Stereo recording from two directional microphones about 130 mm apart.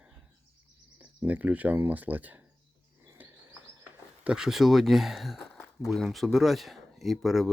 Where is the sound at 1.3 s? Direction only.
10° right (ahead or behind).